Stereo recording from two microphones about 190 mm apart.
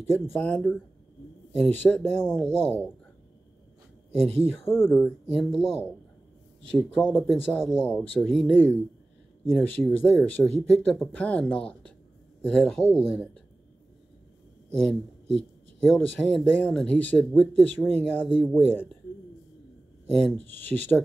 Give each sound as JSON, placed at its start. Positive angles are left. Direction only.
{"t": 0.3, "sound": "speech", "side_deg": 5}
{"t": 1.8, "sound": "speech", "side_deg": 10}
{"t": 4.1, "sound": "speech", "side_deg": -35}
{"t": 4.6, "sound": "speech", "side_deg": 10}
{"t": 5.4, "sound": "speech", "side_deg": 0}
{"t": 8.2, "sound": "speech", "side_deg": 0}
{"t": 8.5, "sound": "speech", "side_deg": 10}
{"t": 14.7, "sound": "speech", "side_deg": 5}
{"t": 18.2, "sound": "speech", "side_deg": -5}
{"t": 18.5, "sound": "speech", "side_deg": 10}
{"t": 20.2, "sound": "speech", "side_deg": 5}